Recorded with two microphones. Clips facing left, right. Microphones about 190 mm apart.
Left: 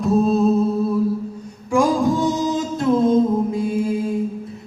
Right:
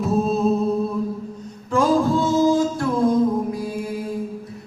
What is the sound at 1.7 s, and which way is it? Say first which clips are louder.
Music: left 1 dB; 15° left (ahead or behind).